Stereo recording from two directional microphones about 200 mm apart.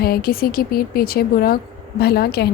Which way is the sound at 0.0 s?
50° left (ahead or behind).